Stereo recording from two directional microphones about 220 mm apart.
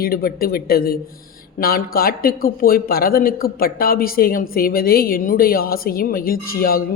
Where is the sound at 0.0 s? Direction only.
40° left (ahead or behind).